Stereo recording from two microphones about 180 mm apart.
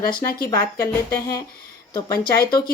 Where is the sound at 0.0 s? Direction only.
55° left (ahead or behind).